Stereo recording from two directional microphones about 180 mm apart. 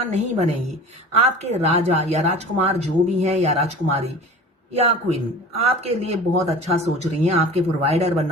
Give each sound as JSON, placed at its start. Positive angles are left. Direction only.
{"t": 0.1, "sound": "speech", "side_deg": -40}